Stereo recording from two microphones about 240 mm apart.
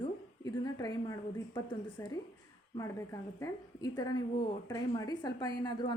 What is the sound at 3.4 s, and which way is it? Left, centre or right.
A woman's voice, centre.